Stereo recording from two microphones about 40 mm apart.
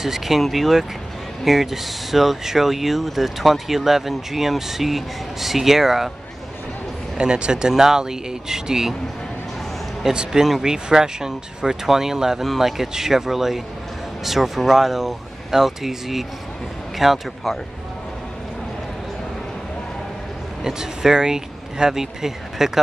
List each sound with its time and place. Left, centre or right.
0.0 s speech: centre
7.2 s speech: right
10.0 s speech: centre
20.6 s speech: centre